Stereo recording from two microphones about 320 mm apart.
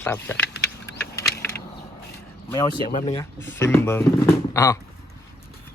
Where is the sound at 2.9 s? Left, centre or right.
Left.